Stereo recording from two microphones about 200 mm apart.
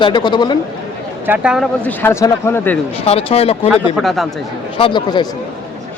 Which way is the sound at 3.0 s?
30° left (ahead or behind).